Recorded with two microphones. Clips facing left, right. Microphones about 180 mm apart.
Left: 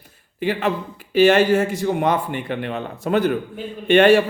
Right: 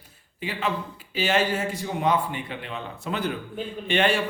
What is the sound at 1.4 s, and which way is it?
A man's voice, 45° left (ahead or behind).